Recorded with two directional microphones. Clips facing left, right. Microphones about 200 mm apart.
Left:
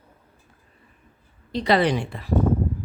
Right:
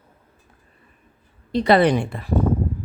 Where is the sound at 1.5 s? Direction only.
55° right (ahead or behind).